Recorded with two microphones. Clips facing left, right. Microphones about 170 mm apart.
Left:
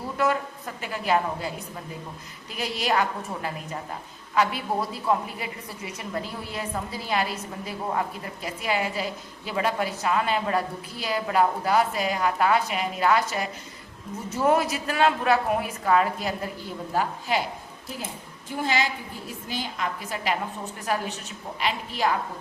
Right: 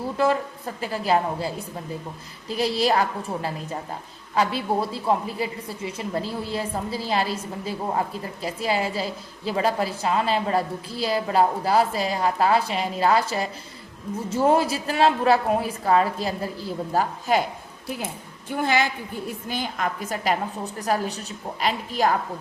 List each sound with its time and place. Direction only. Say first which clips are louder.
0.8 s a woman's voice: right 2 dB; 35° right (ahead or behind)
18.5 s a woman's voice: right 3 dB; 55° right (ahead or behind)